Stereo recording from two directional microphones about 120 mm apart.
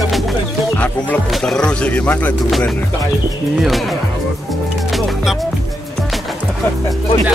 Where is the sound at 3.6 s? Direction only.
Centre (ahead or behind).